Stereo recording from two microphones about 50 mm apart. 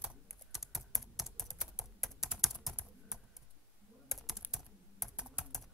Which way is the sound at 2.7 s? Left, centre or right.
Centre.